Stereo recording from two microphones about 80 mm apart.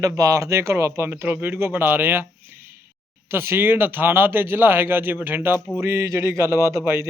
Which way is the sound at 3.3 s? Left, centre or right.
Right.